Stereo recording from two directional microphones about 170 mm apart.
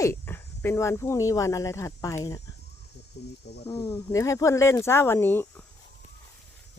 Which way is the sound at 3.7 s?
15° left (ahead or behind).